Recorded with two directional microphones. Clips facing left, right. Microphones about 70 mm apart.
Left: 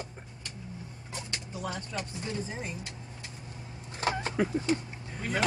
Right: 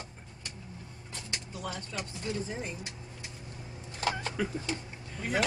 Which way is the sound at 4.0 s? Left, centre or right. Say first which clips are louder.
Left 3 dB; left.